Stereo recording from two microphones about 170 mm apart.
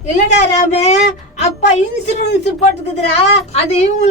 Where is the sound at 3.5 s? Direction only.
40° left (ahead or behind).